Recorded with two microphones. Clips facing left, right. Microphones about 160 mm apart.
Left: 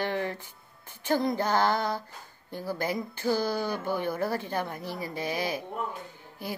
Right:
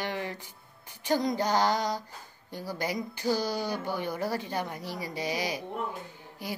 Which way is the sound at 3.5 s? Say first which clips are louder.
Left 2 dB; 15° right (ahead or behind).